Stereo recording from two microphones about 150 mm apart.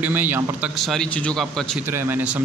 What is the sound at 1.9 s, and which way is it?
Speech, 10° right (ahead or behind).